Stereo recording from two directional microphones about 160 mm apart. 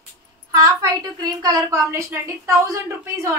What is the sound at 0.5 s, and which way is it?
A woman's voice, 20° right (ahead or behind).